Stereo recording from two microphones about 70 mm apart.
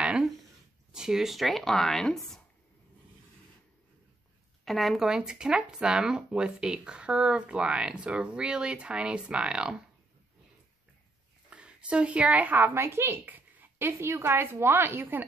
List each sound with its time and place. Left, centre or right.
0.9 s speech: centre
4.6 s speech: centre
11.5 s a woman's voice: centre
12.8 s speech: right